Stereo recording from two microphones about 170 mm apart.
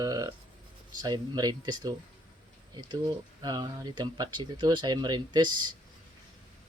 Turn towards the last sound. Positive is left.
turn(degrees=-25)  # may be behind; listen again after turning